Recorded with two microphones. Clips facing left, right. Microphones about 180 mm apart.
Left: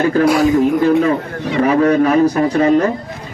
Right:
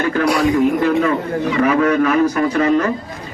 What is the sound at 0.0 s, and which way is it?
Speech, 35° left (ahead or behind).